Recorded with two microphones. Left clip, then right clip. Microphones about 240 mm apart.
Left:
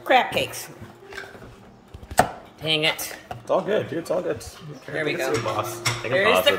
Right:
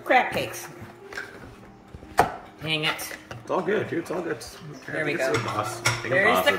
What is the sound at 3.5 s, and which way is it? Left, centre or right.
Speech, left.